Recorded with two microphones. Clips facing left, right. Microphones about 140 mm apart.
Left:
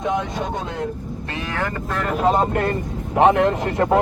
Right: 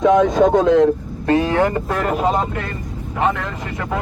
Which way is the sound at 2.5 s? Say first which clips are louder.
Left 6 dB; 45° left (ahead or behind).